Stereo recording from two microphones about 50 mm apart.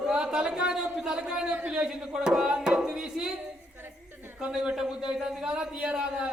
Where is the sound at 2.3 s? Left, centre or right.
Centre.